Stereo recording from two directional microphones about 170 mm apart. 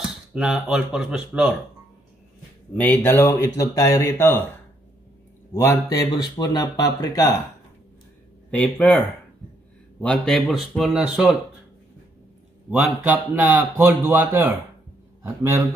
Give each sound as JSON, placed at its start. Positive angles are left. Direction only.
{"t": 0.0, "sound": "speech", "side_deg": -5}
{"t": 2.7, "sound": "speech", "side_deg": 10}
{"t": 5.5, "sound": "speech", "side_deg": 15}
{"t": 8.5, "sound": "speech", "side_deg": 5}
{"t": 12.7, "sound": "a man's voice", "side_deg": -10}